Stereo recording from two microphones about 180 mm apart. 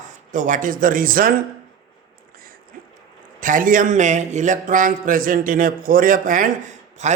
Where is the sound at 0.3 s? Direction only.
45° right (ahead or behind).